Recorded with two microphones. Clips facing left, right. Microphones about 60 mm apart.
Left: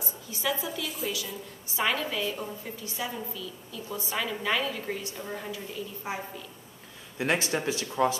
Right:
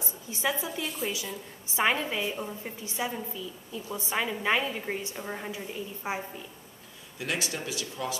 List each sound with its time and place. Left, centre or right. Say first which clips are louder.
0.0 s a sound: right 1 dB; right
0.8 s a woman's voice: right 2 dB; centre
1.8 s a woman's voice: right 1 dB; right
2.3 s a woman's voice: right 1 dB; centre
2.8 s a woman's voice: right 2 dB; right
7.2 s speech: left 5 dB; left